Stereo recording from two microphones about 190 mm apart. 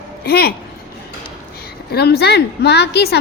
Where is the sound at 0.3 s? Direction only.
55° left (ahead or behind).